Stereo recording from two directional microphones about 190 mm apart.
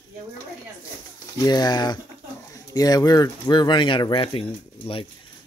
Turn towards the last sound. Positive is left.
turn(degrees=30)  # may be behind; listen again after turning